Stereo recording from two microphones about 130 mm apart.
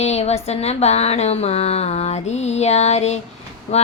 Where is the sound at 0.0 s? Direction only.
55° left (ahead or behind).